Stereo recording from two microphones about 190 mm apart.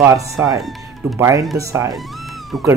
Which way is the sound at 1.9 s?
Centre (ahead or behind).